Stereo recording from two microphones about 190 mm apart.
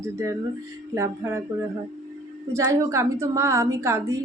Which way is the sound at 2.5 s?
15° right (ahead or behind).